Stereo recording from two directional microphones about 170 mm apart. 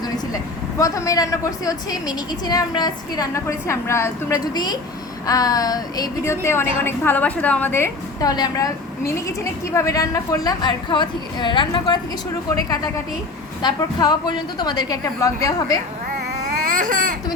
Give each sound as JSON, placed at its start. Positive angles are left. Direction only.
{"t": 0.8, "sound": "a woman's voice", "side_deg": 20}
{"t": 13.6, "sound": "a woman's voice", "side_deg": 25}
{"t": 16.7, "sound": "speech", "side_deg": -50}